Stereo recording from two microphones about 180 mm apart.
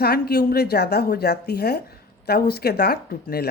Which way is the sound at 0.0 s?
60° left (ahead or behind).